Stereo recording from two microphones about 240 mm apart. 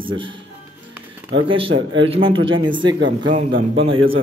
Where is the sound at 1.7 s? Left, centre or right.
Right.